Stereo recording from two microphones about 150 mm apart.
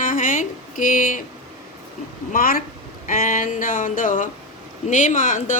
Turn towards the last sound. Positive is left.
turn(degrees=60)  # may be behind; listen again after turning